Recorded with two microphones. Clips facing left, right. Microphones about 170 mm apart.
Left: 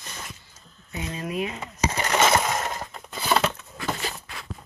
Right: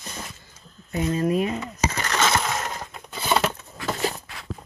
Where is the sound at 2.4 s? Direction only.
Centre (ahead or behind).